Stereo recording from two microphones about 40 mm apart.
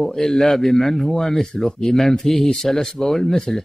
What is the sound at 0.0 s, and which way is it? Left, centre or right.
Speech, centre.